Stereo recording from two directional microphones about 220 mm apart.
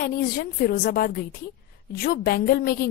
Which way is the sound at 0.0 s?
40° left (ahead or behind).